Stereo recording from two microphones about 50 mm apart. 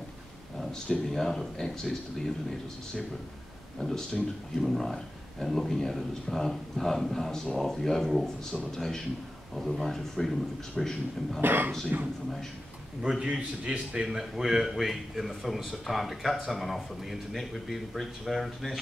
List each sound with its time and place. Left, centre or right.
0.6 s speech: centre
3.8 s a man's voice: centre
11.4 s a man's voice: right
13.2 s a man's voice: right
14.0 s a man's voice: centre